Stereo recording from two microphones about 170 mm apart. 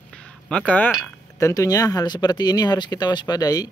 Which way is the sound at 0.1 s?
5° left (ahead or behind).